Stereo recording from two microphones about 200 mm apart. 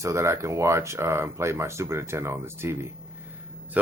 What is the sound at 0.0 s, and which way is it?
Speech, 15° right (ahead or behind).